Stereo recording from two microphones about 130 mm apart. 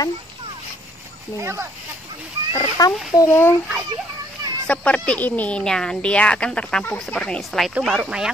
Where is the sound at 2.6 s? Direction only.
30° left (ahead or behind).